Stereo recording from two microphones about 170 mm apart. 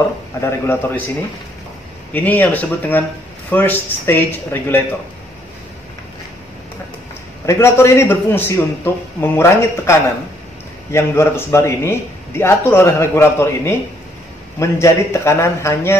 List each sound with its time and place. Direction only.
0.4 s a man's voice: 15° left (ahead or behind)
2.1 s a man's voice: 10° left (ahead or behind)
7.4 s a man's voice: 15° left (ahead or behind)